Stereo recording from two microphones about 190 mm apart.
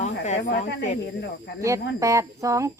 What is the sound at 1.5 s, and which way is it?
Speech, 15° right (ahead or behind).